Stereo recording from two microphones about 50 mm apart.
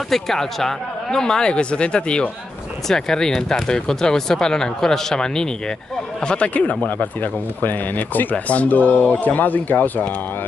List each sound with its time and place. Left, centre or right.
0.1 s speech: centre; by 10.0 s left